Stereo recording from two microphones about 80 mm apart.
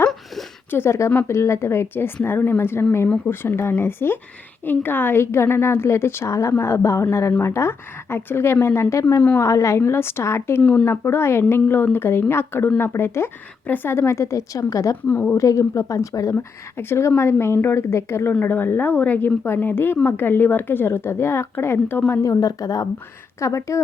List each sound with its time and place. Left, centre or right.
0.7 s a woman's voice: left
10.6 s speech: centre
10.8 s a woman's voice: left
15.0 s speech: left
15.4 s a woman's voice: left
22.2 s a woman's voice: left
23.4 s a woman's voice: left